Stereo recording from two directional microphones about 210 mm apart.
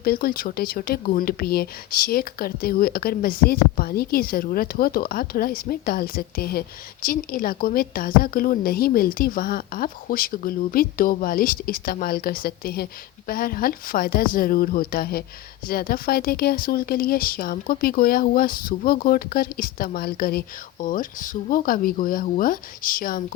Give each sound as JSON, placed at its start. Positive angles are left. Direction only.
{"t": 0.0, "sound": "speech", "side_deg": 45}